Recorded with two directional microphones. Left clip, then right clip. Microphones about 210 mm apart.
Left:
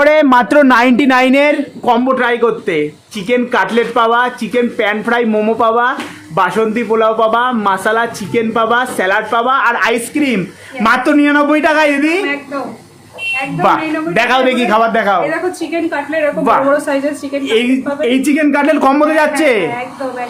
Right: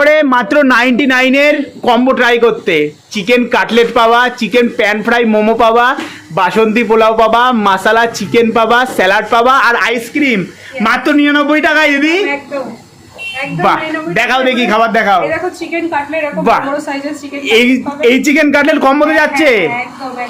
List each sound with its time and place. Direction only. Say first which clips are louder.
0.0 s a man's voice: even; 10° left (ahead or behind)
1.8 s a man's voice: right 3 dB; 10° right (ahead or behind)
9.8 s a man's voice: right 1 dB; centre (ahead or behind)
13.6 s a man's voice: right 1 dB; centre (ahead or behind)
17.4 s a man's voice: right 5 dB; 15° right (ahead or behind)